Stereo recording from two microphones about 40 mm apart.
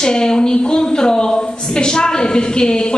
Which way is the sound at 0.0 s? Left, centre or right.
Centre.